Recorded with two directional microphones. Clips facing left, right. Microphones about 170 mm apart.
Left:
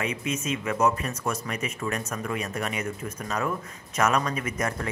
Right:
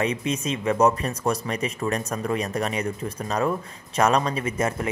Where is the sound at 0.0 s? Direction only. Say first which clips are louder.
Right 4 dB; 35° right (ahead or behind).